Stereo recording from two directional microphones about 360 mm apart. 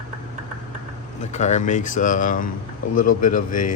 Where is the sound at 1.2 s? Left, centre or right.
Centre.